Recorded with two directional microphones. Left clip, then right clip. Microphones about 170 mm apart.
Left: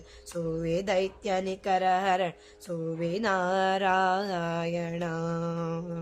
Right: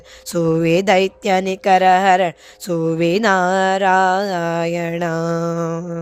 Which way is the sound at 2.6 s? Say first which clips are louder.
Right 15 dB; 60° right (ahead or behind).